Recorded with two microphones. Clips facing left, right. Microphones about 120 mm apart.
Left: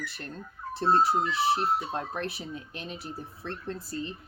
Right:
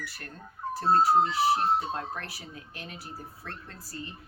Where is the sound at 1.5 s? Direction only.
25° right (ahead or behind).